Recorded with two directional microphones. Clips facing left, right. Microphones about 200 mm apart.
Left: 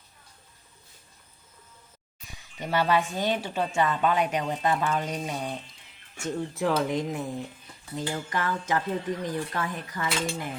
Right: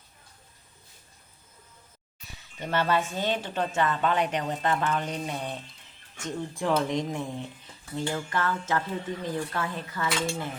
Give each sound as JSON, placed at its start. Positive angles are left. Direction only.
{"t": 2.6, "sound": "speech", "side_deg": 10}